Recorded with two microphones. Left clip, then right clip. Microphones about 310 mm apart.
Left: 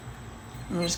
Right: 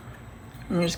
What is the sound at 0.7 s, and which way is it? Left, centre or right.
Speech, right.